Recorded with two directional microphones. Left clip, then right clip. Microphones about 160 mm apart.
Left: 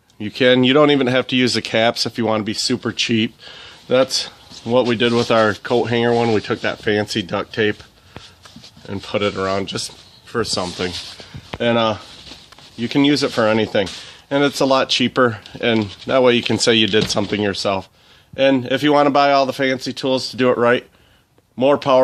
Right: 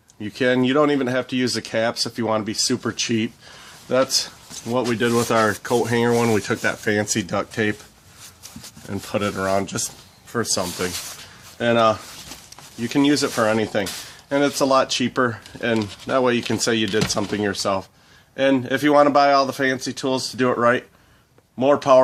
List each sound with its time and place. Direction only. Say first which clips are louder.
0.2 s speech: left 6 dB; 55° left (ahead or behind)
5.4 s rub: left 3 dB; 30° left (ahead or behind)
8.9 s speech: left 4 dB; 40° left (ahead or behind)